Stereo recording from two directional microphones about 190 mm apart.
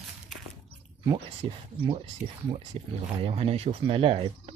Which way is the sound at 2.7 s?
30° right (ahead or behind).